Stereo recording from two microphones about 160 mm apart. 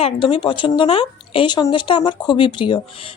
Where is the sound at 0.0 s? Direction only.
35° left (ahead or behind).